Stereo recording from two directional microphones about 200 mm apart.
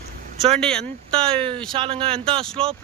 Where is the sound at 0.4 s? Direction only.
Centre (ahead or behind).